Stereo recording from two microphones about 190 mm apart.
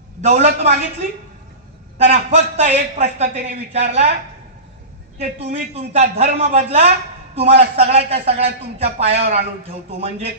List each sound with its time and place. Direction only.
0.2 s speech: 35° right (ahead or behind)
2.5 s speech: 35° right (ahead or behind)
5.2 s speech: 35° right (ahead or behind)